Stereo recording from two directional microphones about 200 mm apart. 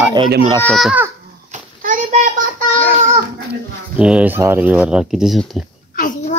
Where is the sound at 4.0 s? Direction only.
5° right (ahead or behind).